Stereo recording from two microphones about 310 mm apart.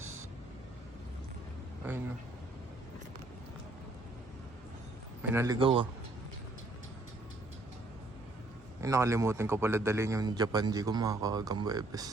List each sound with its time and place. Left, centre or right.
5.2 s a man's voice: centre
8.8 s a man's voice: centre